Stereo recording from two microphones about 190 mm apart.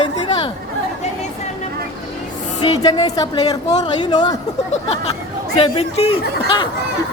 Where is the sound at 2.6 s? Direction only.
25° left (ahead or behind).